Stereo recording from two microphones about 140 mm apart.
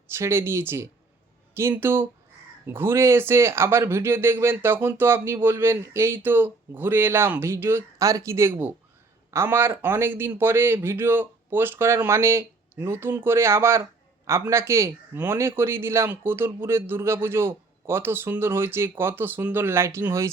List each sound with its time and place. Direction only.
0.1 s speech: 20° right (ahead or behind)